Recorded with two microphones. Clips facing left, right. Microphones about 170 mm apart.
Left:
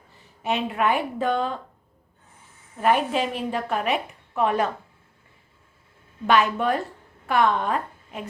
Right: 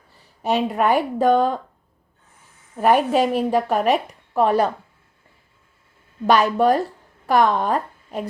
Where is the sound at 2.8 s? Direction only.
40° right (ahead or behind).